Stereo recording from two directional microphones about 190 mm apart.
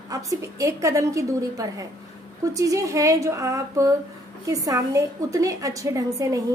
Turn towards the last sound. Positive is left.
turn(degrees=-15)  # may be behind; listen again after turning